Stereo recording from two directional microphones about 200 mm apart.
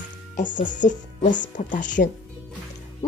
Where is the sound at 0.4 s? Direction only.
40° left (ahead or behind).